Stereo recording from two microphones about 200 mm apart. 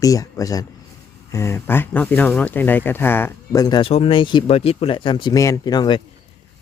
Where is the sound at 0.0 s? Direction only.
15° left (ahead or behind).